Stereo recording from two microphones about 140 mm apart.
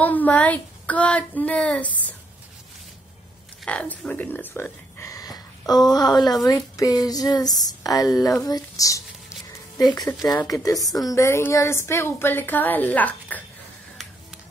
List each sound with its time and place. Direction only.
0.0 s speech: 10° left (ahead or behind)
3.6 s a woman's voice: 10° left (ahead or behind)